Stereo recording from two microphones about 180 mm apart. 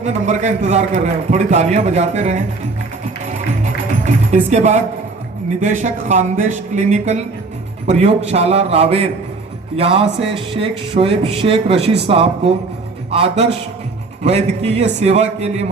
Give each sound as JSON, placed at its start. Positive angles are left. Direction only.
{"t": 0.0, "sound": "a man's voice", "side_deg": -40}
{"t": 3.6, "sound": "music", "side_deg": -40}
{"t": 5.5, "sound": "a man's voice", "side_deg": -45}